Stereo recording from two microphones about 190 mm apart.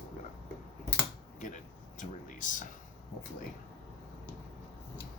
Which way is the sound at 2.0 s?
40° left (ahead or behind).